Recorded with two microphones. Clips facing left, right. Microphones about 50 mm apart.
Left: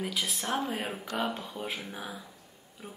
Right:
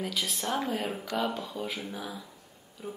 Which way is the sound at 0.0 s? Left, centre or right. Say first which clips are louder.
Even; centre.